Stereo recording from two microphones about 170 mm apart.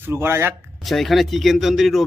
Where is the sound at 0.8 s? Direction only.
Centre (ahead or behind).